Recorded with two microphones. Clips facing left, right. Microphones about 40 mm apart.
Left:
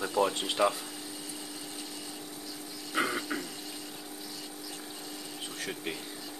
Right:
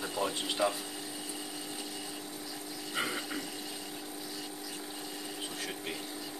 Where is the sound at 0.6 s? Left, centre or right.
Left.